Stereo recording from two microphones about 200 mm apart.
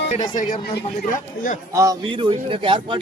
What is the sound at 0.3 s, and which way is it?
Speech, 45° left (ahead or behind).